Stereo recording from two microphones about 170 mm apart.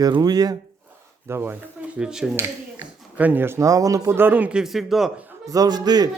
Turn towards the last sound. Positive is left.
turn(degrees=-25)  # may be behind; listen again after turning